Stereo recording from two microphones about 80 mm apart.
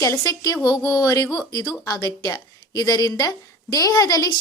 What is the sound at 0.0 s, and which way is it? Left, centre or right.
A woman's voice, left.